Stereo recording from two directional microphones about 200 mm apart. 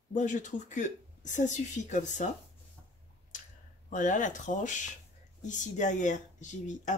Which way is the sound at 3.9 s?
40° left (ahead or behind).